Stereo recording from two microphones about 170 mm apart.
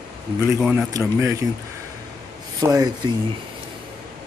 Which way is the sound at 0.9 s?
15° right (ahead or behind).